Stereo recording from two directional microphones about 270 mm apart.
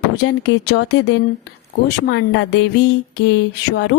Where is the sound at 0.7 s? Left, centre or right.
Left.